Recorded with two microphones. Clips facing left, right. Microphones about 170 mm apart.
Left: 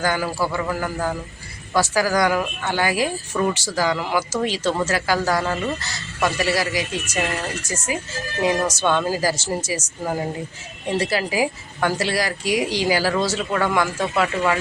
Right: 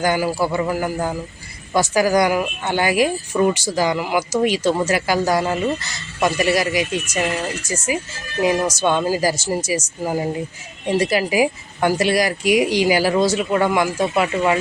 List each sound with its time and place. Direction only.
0.0 s a woman's voice: 15° right (ahead or behind)